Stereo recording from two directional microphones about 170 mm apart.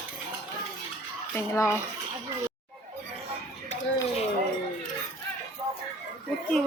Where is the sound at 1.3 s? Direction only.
15° left (ahead or behind).